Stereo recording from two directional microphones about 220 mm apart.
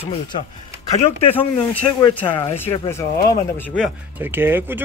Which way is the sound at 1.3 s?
10° left (ahead or behind).